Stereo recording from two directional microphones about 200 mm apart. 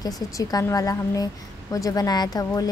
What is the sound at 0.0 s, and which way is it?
A woman's voice, 20° left (ahead or behind).